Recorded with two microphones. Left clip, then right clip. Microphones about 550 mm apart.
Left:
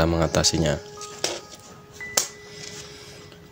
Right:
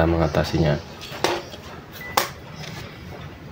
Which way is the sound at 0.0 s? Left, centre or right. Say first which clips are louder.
Right 1 dB; left.